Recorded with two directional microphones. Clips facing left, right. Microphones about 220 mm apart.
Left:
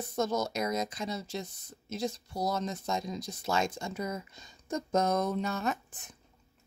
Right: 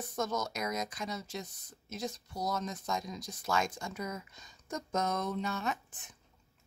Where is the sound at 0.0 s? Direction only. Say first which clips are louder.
Left 4 dB; 25° left (ahead or behind).